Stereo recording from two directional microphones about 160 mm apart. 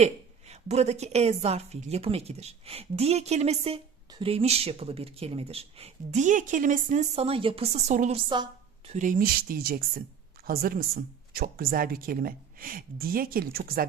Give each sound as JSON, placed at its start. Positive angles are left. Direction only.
{"t": 0.0, "sound": "a woman's voice", "side_deg": -40}
{"t": 7.9, "sound": "speech", "side_deg": -50}
{"t": 8.3, "sound": "a sound", "side_deg": -30}
{"t": 8.9, "sound": "speech", "side_deg": -55}